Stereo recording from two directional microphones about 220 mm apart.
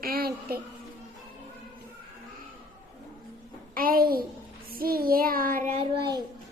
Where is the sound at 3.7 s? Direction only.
40° right (ahead or behind).